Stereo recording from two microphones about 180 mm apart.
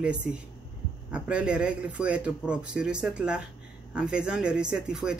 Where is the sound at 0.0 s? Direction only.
5° right (ahead or behind).